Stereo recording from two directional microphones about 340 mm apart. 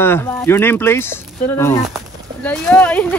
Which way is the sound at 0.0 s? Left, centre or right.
Centre.